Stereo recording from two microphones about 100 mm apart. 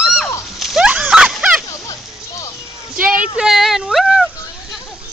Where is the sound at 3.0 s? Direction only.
15° right (ahead or behind).